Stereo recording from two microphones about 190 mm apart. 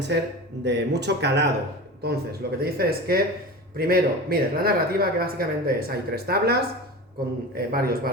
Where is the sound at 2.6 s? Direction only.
50° right (ahead or behind).